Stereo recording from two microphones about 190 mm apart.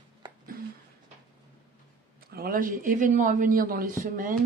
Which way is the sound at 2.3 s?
50° right (ahead or behind).